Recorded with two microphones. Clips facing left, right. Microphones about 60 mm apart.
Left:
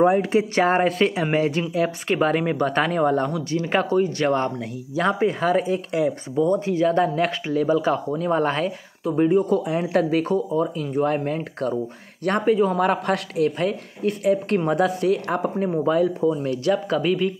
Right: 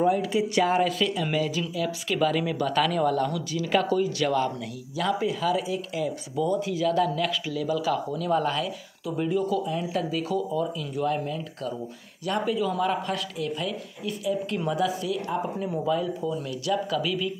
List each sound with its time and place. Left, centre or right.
0.0 s speech: left
9.6 s speech: left
10.3 s speech: left
15.5 s speech: left